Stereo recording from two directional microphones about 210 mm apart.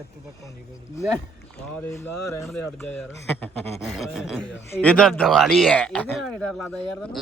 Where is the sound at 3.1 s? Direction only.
15° left (ahead or behind).